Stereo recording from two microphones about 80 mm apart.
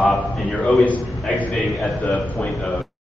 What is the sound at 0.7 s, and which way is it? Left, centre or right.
A man's voice, centre.